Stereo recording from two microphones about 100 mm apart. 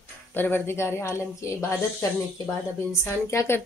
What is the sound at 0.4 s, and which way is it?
Speech, 20° left (ahead or behind).